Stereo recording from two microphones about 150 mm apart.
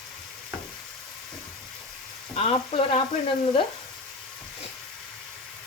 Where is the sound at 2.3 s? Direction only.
40° left (ahead or behind).